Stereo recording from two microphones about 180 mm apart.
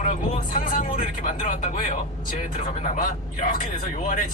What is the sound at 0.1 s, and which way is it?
Speech, 45° left (ahead or behind).